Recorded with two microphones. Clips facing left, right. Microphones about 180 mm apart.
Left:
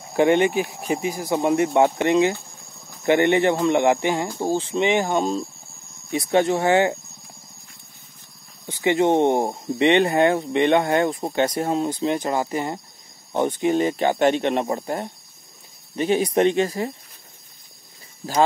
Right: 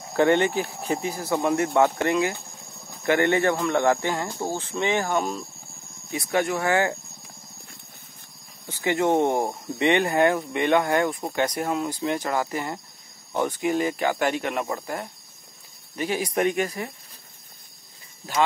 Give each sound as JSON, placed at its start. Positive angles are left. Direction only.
{"t": 0.1, "sound": "speech", "side_deg": 15}
{"t": 8.6, "sound": "speech", "side_deg": 20}